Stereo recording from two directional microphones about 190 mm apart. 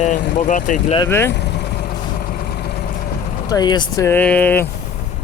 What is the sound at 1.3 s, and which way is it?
Vehicle, 60° left (ahead or behind).